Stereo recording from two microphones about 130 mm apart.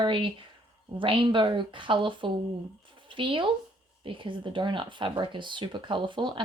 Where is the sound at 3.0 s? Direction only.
40° right (ahead or behind).